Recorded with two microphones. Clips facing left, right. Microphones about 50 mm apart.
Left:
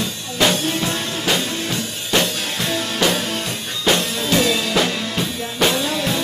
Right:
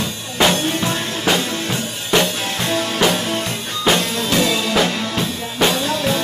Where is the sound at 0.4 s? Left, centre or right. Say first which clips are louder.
Right 2 dB; right.